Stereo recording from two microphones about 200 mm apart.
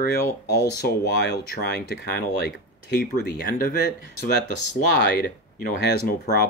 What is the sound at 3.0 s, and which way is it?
Speech, 45° left (ahead or behind).